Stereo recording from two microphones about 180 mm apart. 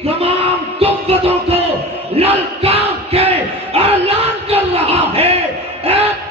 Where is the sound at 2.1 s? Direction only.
35° right (ahead or behind).